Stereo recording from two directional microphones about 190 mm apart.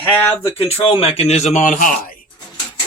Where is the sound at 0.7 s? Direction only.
30° left (ahead or behind).